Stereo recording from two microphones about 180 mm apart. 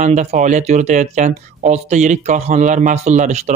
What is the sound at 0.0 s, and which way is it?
Speech, 40° right (ahead or behind).